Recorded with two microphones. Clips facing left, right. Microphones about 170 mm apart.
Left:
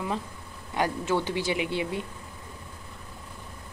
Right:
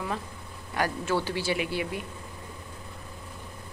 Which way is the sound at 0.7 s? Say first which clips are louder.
Left 1 dB; 20° left (ahead or behind).